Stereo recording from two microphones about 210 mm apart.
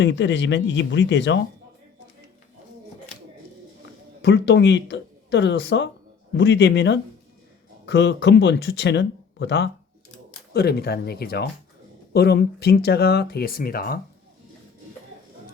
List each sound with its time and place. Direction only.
0.0 s speech: 60° left (ahead or behind)
4.2 s speech: 55° left (ahead or behind)